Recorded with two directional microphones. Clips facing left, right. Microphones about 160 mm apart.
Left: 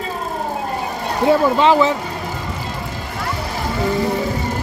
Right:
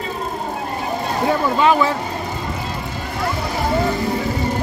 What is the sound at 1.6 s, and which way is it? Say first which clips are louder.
Speech: left 2 dB; 25° left (ahead or behind).